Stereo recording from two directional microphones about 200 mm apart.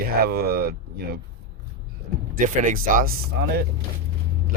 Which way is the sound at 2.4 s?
40° right (ahead or behind).